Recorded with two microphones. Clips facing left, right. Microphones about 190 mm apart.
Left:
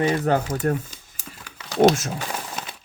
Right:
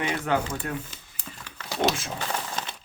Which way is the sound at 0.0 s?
40° left (ahead or behind).